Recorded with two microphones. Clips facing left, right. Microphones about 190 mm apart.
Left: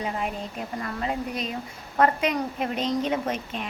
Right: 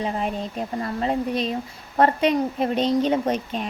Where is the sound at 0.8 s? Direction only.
30° right (ahead or behind).